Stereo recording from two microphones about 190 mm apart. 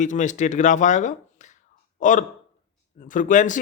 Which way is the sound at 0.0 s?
40° left (ahead or behind).